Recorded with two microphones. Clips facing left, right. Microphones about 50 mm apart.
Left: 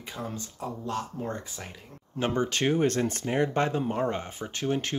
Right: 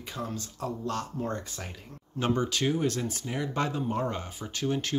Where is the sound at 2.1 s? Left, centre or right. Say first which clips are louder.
Left 1 dB; left.